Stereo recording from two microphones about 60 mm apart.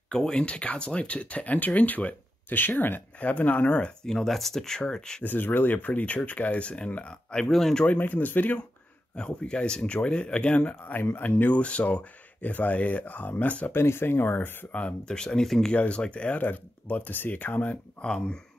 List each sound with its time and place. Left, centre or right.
0.1 s speech: centre
4.1 s speech: centre
5.2 s speech: left
7.2 s speech: centre
7.8 s speech: left
9.1 s speech: centre
13.7 s speech: left
14.8 s speech: centre
15.7 s speech: centre
18.0 s speech: centre